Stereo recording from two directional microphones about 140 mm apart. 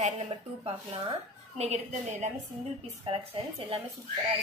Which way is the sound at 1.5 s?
55° right (ahead or behind).